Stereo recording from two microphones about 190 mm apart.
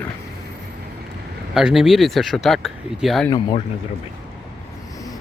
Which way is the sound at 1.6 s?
Centre (ahead or behind).